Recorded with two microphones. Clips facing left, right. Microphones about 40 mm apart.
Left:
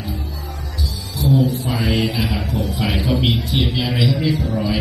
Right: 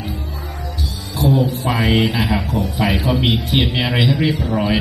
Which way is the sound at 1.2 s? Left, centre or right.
Right.